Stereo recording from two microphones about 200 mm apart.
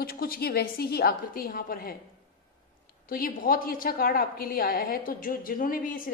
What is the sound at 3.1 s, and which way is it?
A woman's voice, 45° left (ahead or behind).